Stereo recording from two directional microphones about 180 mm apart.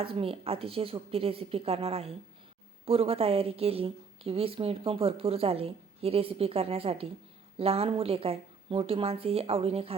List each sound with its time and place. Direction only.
0.0 s a woman's voice: 30° right (ahead or behind)